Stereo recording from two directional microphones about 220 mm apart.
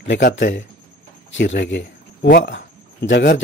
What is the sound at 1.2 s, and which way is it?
Speech, 55° left (ahead or behind).